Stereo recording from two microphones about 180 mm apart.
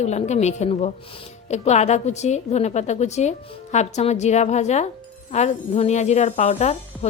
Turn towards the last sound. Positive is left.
turn(degrees=35)  # may be behind; listen again after turning